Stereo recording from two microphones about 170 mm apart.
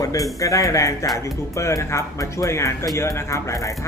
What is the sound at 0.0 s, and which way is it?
Speech, 20° left (ahead or behind).